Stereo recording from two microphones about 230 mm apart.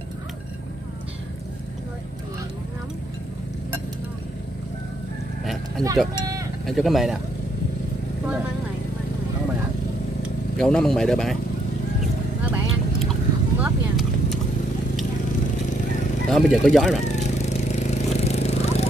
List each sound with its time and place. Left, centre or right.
5.4 s a sound: centre
6.6 s speech: centre
10.6 s speech: centre
13.0 s clip-clop: centre
16.3 s speech: centre
17.1 s a sound: left